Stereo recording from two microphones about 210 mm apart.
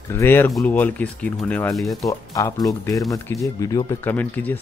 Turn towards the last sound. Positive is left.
turn(degrees=10)  # may be behind; listen again after turning